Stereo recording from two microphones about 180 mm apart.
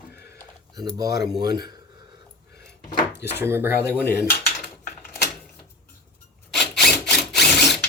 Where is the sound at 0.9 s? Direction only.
20° right (ahead or behind).